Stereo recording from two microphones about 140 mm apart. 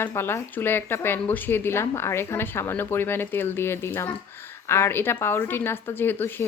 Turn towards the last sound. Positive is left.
turn(degrees=15)  # may be behind; listen again after turning